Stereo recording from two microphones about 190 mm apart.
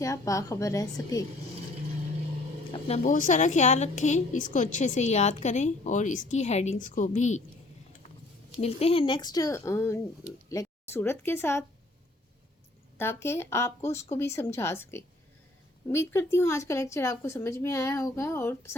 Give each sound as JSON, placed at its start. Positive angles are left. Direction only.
{"t": 0.0, "sound": "speech", "side_deg": 15}
{"t": 2.7, "sound": "a woman's voice", "side_deg": 35}
{"t": 8.6, "sound": "a woman's voice", "side_deg": 30}
{"t": 13.0, "sound": "speech", "side_deg": 15}